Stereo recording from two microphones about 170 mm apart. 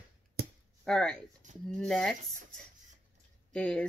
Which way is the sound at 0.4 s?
70° right (ahead or behind).